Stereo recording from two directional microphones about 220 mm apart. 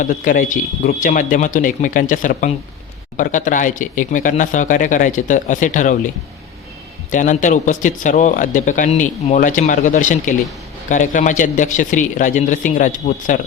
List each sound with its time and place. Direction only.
0.0 s speech: 35° left (ahead or behind)
7.1 s speech: 35° left (ahead or behind)